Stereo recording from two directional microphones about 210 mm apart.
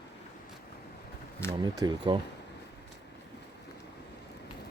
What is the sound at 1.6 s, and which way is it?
Speech, 20° right (ahead or behind).